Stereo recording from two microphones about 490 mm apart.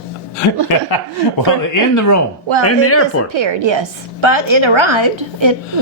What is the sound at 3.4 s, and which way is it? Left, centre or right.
A woman's voice, right.